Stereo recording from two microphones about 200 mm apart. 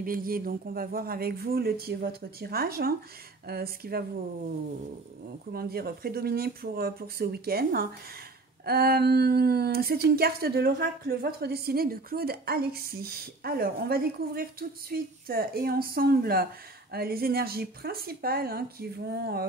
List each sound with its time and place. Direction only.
0.0 s speech: 45° right (ahead or behind)
5.5 s speech: 50° right (ahead or behind)